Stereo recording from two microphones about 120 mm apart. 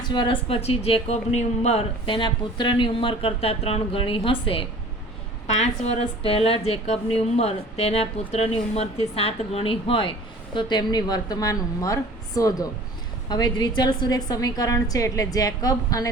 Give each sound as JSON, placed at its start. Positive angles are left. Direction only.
{"t": 0.0, "sound": "speech", "side_deg": 40}
{"t": 0.4, "sound": "a woman's voice", "side_deg": 55}
{"t": 2.0, "sound": "speech", "side_deg": 40}
{"t": 5.5, "sound": "a woman's voice", "side_deg": 65}